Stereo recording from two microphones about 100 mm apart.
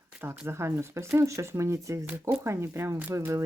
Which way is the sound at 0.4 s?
25° right (ahead or behind).